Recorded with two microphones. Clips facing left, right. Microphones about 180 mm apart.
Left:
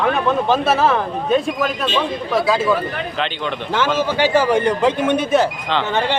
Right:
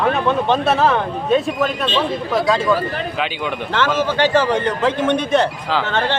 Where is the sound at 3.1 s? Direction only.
5° right (ahead or behind).